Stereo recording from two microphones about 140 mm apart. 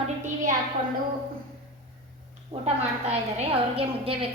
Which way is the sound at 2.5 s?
50° right (ahead or behind).